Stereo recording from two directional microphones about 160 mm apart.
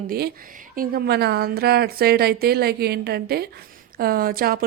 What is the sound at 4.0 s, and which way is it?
Speech, 65° right (ahead or behind).